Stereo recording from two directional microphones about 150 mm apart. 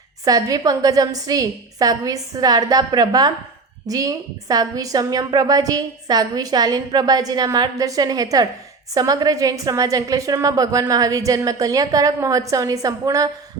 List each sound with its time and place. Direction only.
0.3 s a woman's voice: 25° right (ahead or behind)